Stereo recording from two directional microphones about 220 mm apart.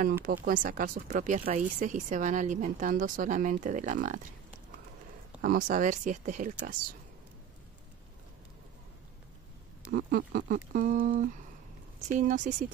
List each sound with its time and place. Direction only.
0.5 s speech: 40° right (ahead or behind)
5.4 s speech: 40° right (ahead or behind)
9.9 s speech: 40° right (ahead or behind)